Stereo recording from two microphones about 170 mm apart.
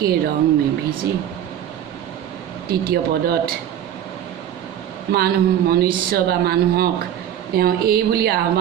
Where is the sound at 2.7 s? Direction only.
65° right (ahead or behind).